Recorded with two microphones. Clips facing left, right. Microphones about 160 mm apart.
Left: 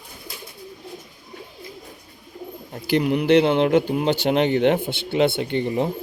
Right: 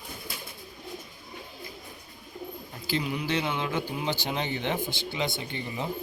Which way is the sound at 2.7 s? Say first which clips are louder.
Left 11 dB; 60° left (ahead or behind).